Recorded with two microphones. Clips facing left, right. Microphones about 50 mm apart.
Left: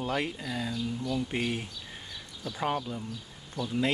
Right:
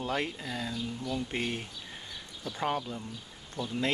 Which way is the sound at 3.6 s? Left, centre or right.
Right.